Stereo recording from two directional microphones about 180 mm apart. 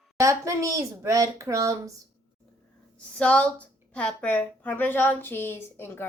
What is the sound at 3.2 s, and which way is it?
A woman's voice, 5° left (ahead or behind).